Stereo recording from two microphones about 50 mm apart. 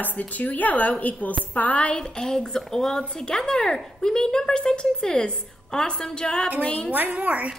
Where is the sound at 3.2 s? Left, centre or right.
Centre.